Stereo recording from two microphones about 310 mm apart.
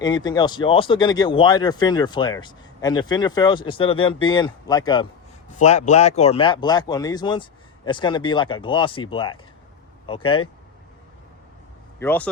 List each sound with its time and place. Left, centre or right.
0.0 s speech: centre
11.9 s speech: centre